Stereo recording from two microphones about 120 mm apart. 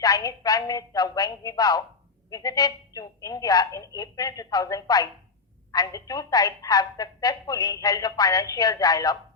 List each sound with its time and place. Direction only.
0.0 s a woman's voice: 30° left (ahead or behind)